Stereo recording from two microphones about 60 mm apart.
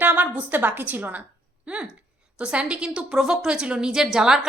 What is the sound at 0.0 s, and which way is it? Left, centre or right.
A woman's voice, right.